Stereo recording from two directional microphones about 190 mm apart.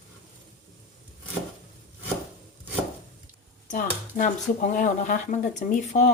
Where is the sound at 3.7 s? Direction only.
40° left (ahead or behind).